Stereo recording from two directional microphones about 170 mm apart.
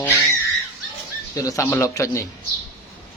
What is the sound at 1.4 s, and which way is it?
Speech, 20° left (ahead or behind).